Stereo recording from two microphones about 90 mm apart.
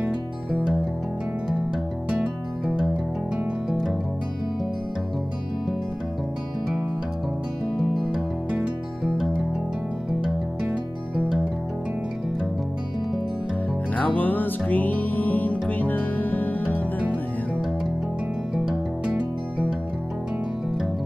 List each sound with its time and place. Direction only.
2.0 s music: 5° right (ahead or behind)
8.5 s music: 5° right (ahead or behind)
13.9 s music: 20° left (ahead or behind)
18.5 s music: 10° right (ahead or behind)